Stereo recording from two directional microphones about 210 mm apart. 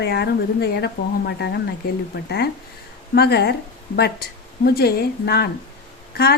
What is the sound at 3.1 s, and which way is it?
Speech, 50° left (ahead or behind).